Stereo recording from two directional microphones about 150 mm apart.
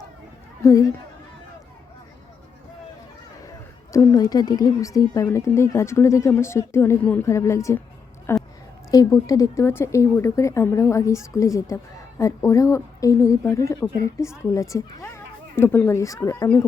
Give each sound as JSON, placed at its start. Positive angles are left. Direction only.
{"t": 0.6, "sound": "speech", "side_deg": 20}
{"t": 3.9, "sound": "a woman's voice", "side_deg": 20}